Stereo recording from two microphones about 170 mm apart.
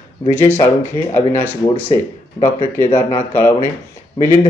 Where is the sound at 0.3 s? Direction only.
15° left (ahead or behind).